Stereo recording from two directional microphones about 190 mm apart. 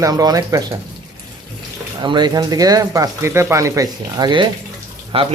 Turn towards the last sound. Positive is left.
turn(degrees=-30)  # may be behind; listen again after turning